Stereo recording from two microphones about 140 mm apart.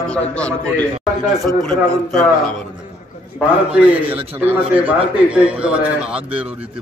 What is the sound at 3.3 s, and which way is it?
Speech, 10° right (ahead or behind).